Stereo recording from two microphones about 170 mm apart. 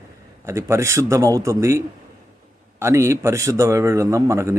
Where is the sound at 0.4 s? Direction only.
15° right (ahead or behind).